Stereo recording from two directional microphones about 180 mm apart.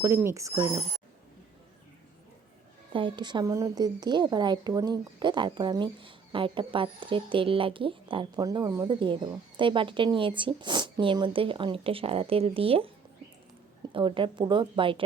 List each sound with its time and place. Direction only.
0.0 s speech: 15° right (ahead or behind)
2.9 s a woman's voice: 25° right (ahead or behind)
13.9 s a woman's voice: 30° right (ahead or behind)